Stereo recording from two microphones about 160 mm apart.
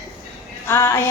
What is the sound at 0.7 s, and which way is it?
Speech, 15° left (ahead or behind).